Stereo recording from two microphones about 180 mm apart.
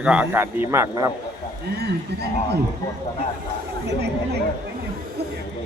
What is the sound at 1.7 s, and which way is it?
Speech, 65° right (ahead or behind).